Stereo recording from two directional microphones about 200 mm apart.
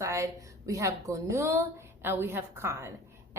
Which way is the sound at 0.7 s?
15° right (ahead or behind).